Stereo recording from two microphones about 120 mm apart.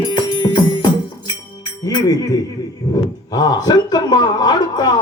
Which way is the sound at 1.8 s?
30° left (ahead or behind).